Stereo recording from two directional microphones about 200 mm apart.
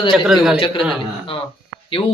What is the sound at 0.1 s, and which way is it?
Speech, centre (ahead or behind).